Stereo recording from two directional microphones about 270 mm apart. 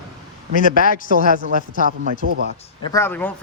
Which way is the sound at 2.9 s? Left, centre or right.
Centre.